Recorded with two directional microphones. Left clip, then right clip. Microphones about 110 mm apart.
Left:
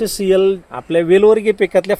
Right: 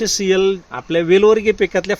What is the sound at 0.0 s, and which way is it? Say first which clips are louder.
Speech: left 2 dB; 15° right (ahead or behind).